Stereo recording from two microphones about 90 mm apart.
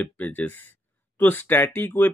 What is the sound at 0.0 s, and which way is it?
Speech, 20° left (ahead or behind).